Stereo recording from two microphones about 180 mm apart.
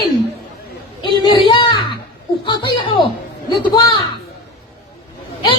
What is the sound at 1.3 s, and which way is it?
A child's voice, 25° left (ahead or behind).